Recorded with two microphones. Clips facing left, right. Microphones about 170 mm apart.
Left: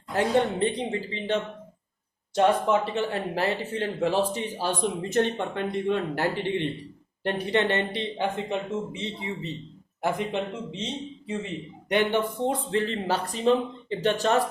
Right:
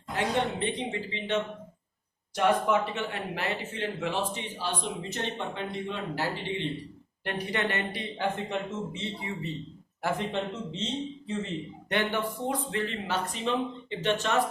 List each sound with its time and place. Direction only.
0.6 s a man's voice: 35° left (ahead or behind); by 6.4 s 55° left (ahead or behind)
7.3 s a man's voice: 30° left (ahead or behind)